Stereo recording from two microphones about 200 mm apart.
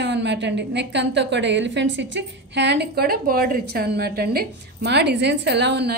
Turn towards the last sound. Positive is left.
turn(degrees=-60)  # may be behind; listen again after turning